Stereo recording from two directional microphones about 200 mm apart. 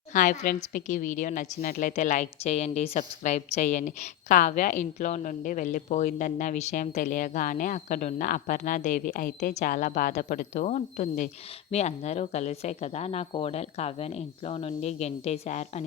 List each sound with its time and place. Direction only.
0.1 s a woman's voice: 40° left (ahead or behind)